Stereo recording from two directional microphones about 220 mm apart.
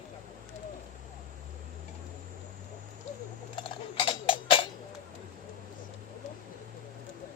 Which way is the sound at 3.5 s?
25° left (ahead or behind).